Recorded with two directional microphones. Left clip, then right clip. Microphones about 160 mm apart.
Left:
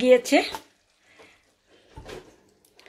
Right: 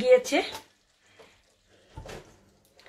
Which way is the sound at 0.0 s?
50° left (ahead or behind).